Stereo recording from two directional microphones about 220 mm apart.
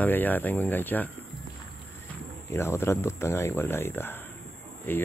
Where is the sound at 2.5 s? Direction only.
10° left (ahead or behind).